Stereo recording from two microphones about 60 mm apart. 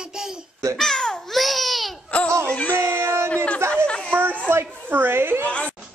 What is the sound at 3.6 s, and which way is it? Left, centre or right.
Chatter, right.